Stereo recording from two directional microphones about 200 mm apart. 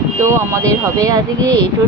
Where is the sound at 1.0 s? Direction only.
15° right (ahead or behind).